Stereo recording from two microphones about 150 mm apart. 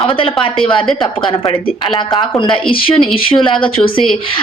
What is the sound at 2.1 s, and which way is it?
Speech, 30° left (ahead or behind).